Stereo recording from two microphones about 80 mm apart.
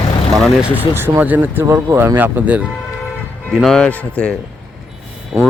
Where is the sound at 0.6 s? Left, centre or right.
Right.